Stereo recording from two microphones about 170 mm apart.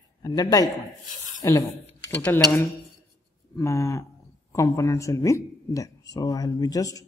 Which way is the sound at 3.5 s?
15° left (ahead or behind).